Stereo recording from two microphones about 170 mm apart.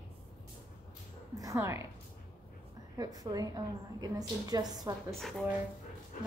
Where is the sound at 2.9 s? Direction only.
20° right (ahead or behind).